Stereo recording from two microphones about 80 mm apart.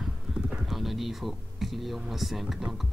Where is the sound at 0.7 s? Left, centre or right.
Centre.